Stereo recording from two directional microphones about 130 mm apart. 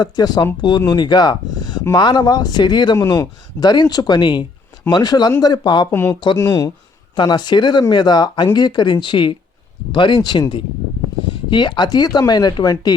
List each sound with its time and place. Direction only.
0.0 s speech: 30° left (ahead or behind)
5.9 s speech: 15° left (ahead or behind)
7.2 s speech: 35° left (ahead or behind)